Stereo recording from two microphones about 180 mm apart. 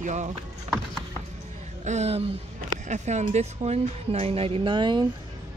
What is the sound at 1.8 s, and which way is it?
A woman's voice, 40° right (ahead or behind).